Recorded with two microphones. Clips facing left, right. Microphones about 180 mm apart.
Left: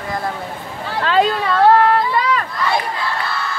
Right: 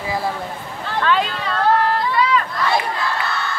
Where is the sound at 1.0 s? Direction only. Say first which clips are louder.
Left 4 dB; 35° left (ahead or behind).